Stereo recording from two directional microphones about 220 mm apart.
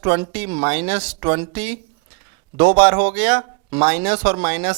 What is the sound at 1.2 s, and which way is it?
Speech, 20° right (ahead or behind).